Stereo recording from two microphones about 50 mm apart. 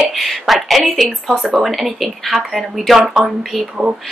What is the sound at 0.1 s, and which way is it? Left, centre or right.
Speech, centre.